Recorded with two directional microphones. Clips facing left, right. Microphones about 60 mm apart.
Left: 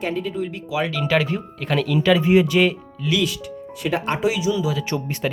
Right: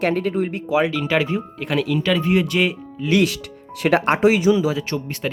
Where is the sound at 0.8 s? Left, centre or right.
Centre.